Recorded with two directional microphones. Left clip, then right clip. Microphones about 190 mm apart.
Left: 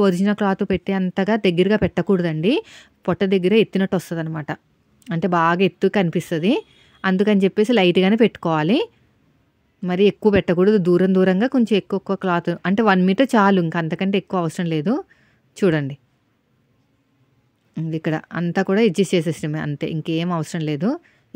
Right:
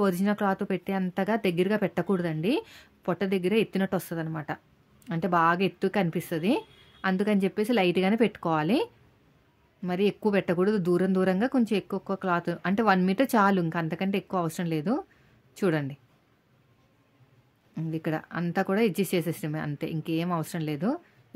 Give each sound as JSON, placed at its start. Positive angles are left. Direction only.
{"t": 0.0, "sound": "speech", "side_deg": 30}
{"t": 17.7, "sound": "speech", "side_deg": 35}